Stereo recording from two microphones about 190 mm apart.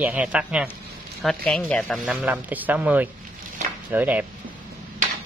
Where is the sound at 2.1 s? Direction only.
10° right (ahead or behind).